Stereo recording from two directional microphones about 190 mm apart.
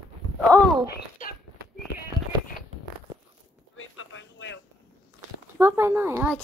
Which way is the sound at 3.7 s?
90° left.